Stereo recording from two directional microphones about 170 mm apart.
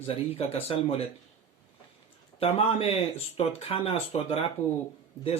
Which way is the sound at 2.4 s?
35° left (ahead or behind).